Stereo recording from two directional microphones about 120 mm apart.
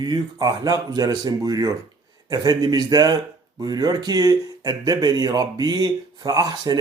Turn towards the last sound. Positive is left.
turn(degrees=-35)  # may be behind; listen again after turning